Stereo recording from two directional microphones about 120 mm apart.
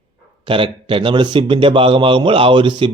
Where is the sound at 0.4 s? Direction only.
45° right (ahead or behind).